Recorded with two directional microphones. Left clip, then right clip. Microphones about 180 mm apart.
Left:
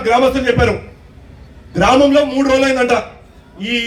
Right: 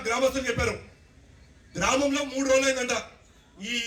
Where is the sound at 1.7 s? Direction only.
25° left (ahead or behind).